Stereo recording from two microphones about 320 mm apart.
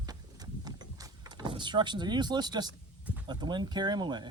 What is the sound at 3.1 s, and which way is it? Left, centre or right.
Speech, centre.